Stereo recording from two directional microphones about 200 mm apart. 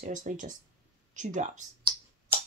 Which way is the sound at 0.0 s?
40° right (ahead or behind).